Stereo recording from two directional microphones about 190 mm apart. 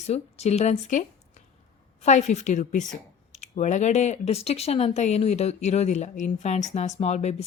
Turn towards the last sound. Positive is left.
turn(degrees=35)  # may be behind; listen again after turning